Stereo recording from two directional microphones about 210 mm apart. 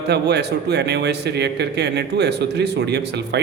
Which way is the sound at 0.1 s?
50° right (ahead or behind).